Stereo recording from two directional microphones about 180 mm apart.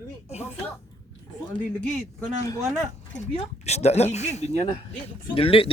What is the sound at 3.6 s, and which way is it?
Speech, 35° left (ahead or behind).